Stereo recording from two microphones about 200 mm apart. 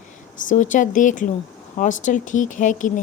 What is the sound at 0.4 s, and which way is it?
Speech, 40° left (ahead or behind).